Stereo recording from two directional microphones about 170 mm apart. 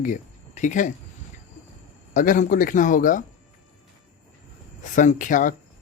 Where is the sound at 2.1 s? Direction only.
50° left (ahead or behind).